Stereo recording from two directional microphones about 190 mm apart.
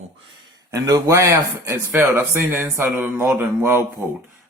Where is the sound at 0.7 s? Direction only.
20° right (ahead or behind).